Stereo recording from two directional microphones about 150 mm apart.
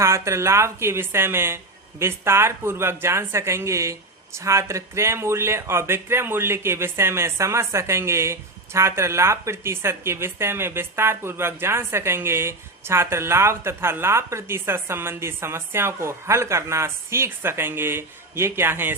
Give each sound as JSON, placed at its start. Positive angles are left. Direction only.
{"t": 0.0, "sound": "speech", "side_deg": -20}